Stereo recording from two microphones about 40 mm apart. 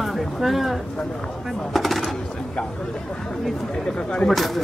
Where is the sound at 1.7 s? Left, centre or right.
Centre.